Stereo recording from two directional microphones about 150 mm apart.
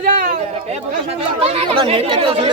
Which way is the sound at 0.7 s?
40° right (ahead or behind).